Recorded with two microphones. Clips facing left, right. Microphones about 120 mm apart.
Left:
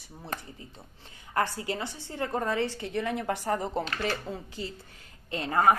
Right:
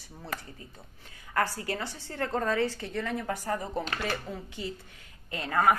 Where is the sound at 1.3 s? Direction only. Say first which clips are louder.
Left 1 dB; 20° left (ahead or behind).